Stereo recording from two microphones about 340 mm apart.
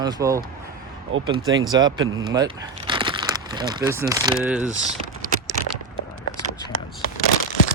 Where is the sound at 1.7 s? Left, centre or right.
Centre.